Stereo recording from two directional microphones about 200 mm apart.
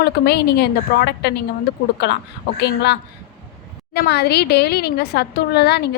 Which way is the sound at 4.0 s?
55° left (ahead or behind).